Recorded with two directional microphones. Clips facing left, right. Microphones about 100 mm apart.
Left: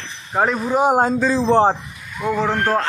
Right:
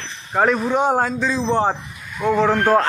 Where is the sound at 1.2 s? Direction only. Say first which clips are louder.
Left 4 dB; 40° left (ahead or behind).